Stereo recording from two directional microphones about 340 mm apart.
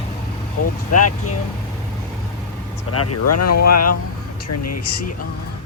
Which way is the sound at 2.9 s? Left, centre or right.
Left.